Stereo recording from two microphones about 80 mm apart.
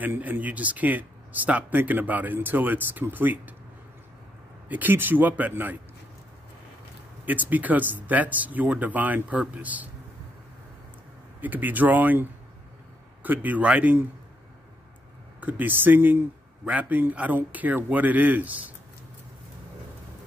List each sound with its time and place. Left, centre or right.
0.0 s speech: right
4.6 s speech: right
7.2 s speech: right
11.4 s speech: right
15.4 s speech: right